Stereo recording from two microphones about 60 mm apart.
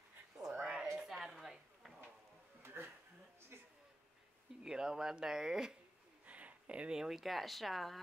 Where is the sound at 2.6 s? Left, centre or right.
Right.